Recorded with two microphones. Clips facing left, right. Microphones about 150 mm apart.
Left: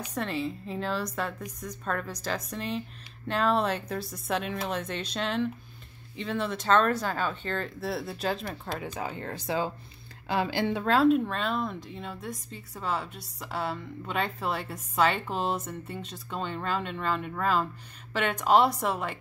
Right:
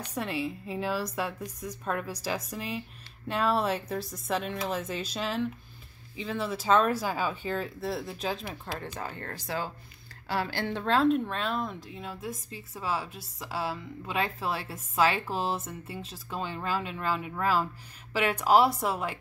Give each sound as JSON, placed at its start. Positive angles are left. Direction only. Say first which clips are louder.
{"t": 0.1, "sound": "speech", "louder": "left 1 dB", "side_deg": -10}
{"t": 8.8, "sound": "speech", "louder": "left 3 dB", "side_deg": 15}